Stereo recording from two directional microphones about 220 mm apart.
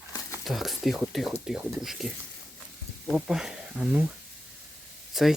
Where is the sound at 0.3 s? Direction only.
Centre (ahead or behind).